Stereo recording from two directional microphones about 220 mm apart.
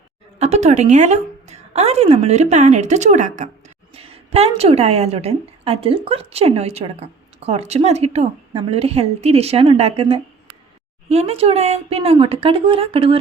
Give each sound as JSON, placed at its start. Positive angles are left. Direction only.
{"t": 0.3, "sound": "a woman's voice", "side_deg": -30}